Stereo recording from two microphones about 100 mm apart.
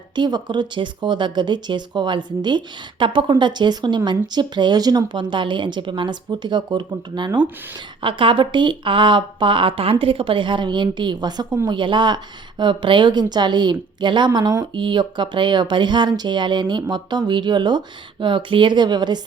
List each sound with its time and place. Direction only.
0.2 s speech: 45° right (ahead or behind)
11.7 s speech: 55° right (ahead or behind)